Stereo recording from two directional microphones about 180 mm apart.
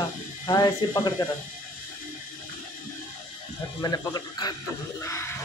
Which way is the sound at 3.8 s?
20° left (ahead or behind).